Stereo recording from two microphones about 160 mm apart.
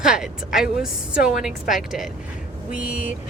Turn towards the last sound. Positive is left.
turn(degrees=-10)  # may be behind; listen again after turning